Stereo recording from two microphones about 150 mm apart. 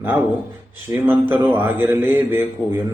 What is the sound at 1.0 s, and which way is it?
A man's voice, 15° right (ahead or behind).